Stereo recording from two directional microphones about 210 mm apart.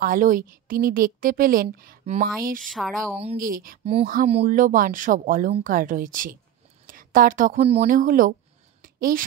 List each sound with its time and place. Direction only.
0.0 s speech: 40° right (ahead or behind)
2.7 s speech: centre (ahead or behind)
3.3 s a woman's voice: 40° right (ahead or behind)
8.8 s a sound: 40° right (ahead or behind)